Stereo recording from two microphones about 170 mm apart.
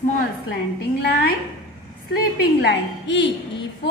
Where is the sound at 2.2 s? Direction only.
75° left (ahead or behind).